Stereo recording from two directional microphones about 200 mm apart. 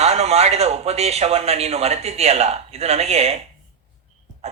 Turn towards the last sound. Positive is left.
turn(degrees=-30)  # may be behind; listen again after turning